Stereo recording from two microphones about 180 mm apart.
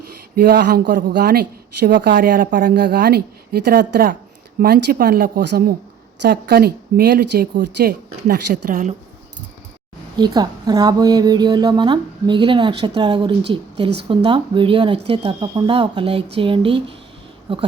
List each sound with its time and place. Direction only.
0.3 s speech: 60° right (ahead or behind)
2.7 s speech: 65° right (ahead or behind); by 9.0 s 45° right (ahead or behind)
10.2 s a woman's voice: 25° right (ahead or behind)